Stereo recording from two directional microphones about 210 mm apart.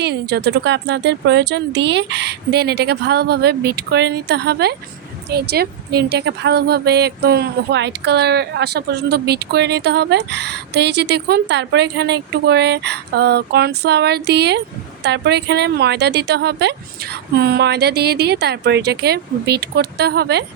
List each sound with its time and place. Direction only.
0.0 s a woman's voice: 50° right (ahead or behind)